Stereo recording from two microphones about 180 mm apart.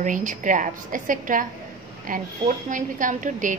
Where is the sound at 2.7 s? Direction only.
45° right (ahead or behind).